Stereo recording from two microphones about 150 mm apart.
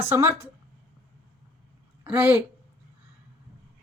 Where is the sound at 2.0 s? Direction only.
10° right (ahead or behind).